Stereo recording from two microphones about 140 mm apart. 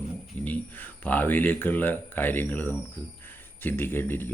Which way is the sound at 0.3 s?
10° left (ahead or behind).